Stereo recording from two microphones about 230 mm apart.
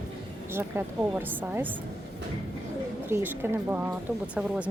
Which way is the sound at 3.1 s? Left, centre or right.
Centre.